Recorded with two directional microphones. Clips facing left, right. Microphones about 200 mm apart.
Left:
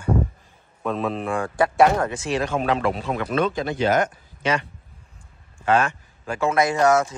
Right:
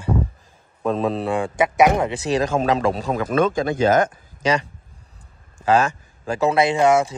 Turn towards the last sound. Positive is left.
turn(degrees=-30)  # may be behind; listen again after turning